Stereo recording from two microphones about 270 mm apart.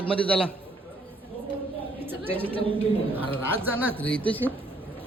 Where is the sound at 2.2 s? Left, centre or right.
Centre.